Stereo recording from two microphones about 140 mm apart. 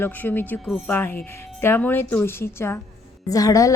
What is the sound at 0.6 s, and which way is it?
Speech, centre (ahead or behind).